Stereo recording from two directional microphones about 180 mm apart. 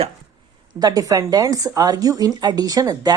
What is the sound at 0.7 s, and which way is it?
A woman's voice, 20° right (ahead or behind).